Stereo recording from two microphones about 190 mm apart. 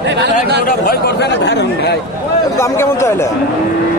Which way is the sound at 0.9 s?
60° left (ahead or behind).